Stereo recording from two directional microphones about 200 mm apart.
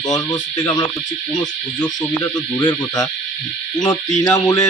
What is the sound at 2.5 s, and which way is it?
Speech, 20° left (ahead or behind).